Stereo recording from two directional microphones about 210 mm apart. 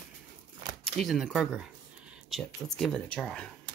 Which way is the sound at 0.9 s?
Centre (ahead or behind).